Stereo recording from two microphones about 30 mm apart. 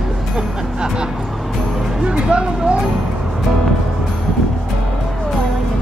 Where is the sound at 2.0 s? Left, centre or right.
Right.